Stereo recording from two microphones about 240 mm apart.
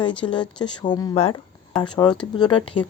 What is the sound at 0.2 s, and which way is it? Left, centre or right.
Speech, centre.